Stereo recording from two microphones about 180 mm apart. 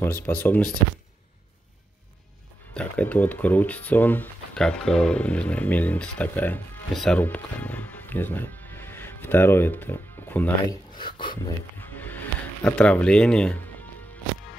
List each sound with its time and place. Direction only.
0.0 s speech: 10° left (ahead or behind)
2.7 s speech: 10° left (ahead or behind)
10.7 s speech: 25° left (ahead or behind)
11.8 s music: 10° left (ahead or behind)
12.6 s speech: 5° left (ahead or behind)